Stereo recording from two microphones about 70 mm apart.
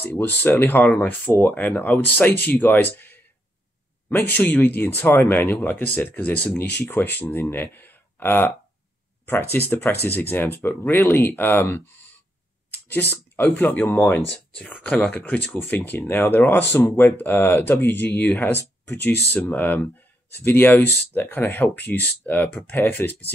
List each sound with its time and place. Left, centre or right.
0.2 s speech: left
1.3 s speech: centre; by 5.6 s left
5.6 s speech: left
15.0 s speech: left